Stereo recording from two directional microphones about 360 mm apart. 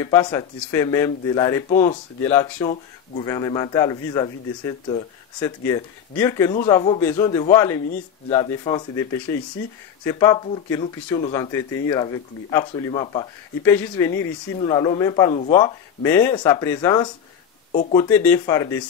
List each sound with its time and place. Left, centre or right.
0.0 s speech: centre